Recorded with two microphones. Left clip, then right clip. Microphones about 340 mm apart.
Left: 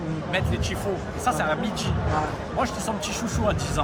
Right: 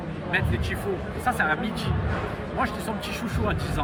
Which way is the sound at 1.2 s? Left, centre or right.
Centre.